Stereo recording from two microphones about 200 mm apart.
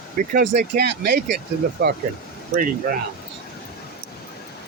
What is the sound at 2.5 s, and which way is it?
Speech, 45° right (ahead or behind).